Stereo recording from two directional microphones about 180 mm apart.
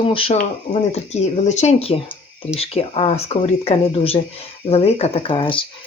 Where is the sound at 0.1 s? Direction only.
30° left (ahead or behind).